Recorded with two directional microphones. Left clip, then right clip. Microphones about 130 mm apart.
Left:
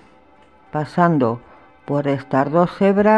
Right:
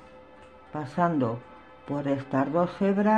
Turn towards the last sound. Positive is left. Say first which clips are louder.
# left 10 dB
turn(degrees=90)